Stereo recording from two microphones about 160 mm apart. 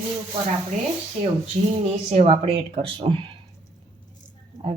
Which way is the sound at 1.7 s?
40° right (ahead or behind).